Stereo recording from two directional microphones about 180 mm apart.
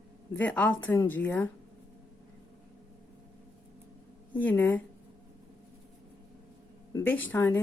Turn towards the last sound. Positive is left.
turn(degrees=10)  # may be behind; listen again after turning